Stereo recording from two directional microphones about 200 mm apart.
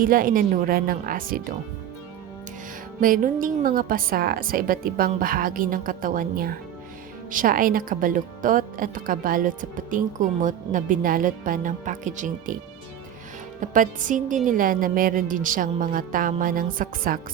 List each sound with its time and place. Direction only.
0.0 s speech: 45° right (ahead or behind)
3.0 s speech: 45° right (ahead or behind)
13.6 s music: 40° right (ahead or behind)
14.4 s speech: 45° right (ahead or behind)